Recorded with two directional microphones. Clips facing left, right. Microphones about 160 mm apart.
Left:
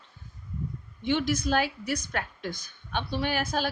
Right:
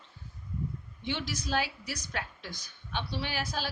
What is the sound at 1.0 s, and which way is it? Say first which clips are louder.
A woman's voice: left 9 dB; 50° left (ahead or behind).